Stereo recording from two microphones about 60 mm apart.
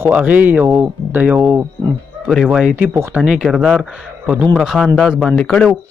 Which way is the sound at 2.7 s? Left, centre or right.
Right.